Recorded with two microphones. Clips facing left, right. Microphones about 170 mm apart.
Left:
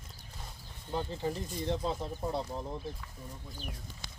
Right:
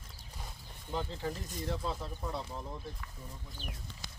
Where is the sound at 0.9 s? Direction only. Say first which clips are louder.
Left 3 dB; 15° left (ahead or behind); by 2.8 s 30° left (ahead or behind).